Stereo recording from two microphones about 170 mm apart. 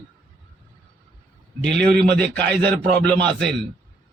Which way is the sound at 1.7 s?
70° right (ahead or behind).